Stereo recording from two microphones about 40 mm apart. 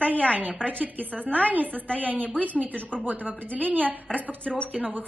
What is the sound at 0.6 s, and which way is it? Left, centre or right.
A woman's voice, right.